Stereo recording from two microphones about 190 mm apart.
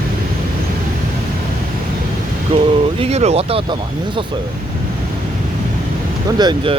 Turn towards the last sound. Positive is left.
turn(degrees=-25)  # may be behind; listen again after turning